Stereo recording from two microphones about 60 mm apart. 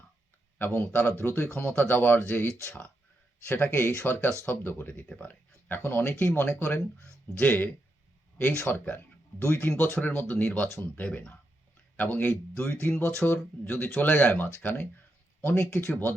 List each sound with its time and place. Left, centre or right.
0.6 s speech: left
1.7 s speech: left
5.0 s speech: centre; by 6.8 s left
7.3 s speech: left
12.0 s speech: left
13.7 s speech: left